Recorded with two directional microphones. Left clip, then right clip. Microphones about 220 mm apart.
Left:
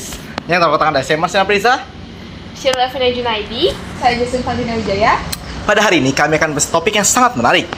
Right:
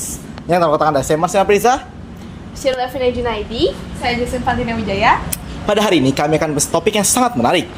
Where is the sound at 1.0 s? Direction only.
30° right (ahead or behind).